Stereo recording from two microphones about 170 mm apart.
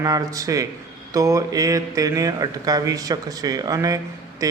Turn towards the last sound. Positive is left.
turn(degrees=-20)  # may be behind; listen again after turning